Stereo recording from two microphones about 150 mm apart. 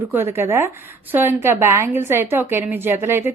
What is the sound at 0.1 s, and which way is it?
A woman's voice, 15° right (ahead or behind).